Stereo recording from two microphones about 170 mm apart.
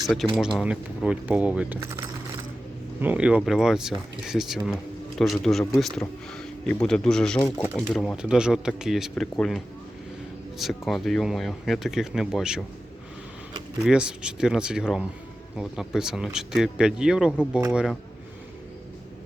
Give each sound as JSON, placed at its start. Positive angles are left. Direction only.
{"t": 0.3, "sound": "speech", "side_deg": -5}
{"t": 1.8, "sound": "speech", "side_deg": -15}
{"t": 10.6, "sound": "speech", "side_deg": 0}
{"t": 13.8, "sound": "speech", "side_deg": -5}